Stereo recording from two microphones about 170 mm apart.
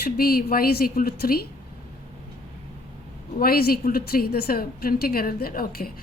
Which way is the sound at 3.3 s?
60° left (ahead or behind).